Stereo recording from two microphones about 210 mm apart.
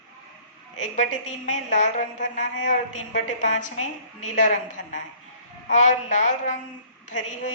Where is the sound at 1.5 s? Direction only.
35° left (ahead or behind).